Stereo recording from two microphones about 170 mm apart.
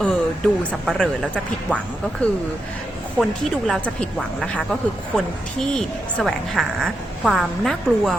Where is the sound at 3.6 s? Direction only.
5° left (ahead or behind).